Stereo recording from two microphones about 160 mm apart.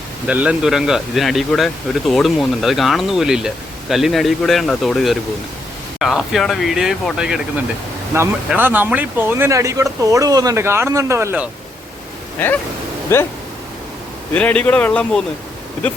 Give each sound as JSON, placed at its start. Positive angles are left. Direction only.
{"t": 0.3, "sound": "speech", "side_deg": -10}
{"t": 8.1, "sound": "speech", "side_deg": -20}
{"t": 13.1, "sound": "speech", "side_deg": 15}
{"t": 14.3, "sound": "speech", "side_deg": 10}